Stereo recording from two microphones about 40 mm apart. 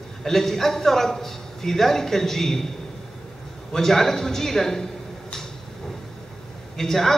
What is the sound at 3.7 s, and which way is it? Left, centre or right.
Speech, centre.